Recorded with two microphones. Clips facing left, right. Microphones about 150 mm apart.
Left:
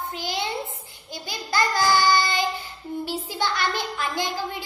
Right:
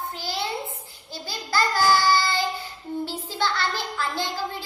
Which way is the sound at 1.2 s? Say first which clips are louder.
Even; 20° left (ahead or behind).